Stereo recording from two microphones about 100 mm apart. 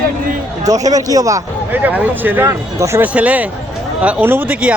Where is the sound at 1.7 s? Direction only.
15° right (ahead or behind).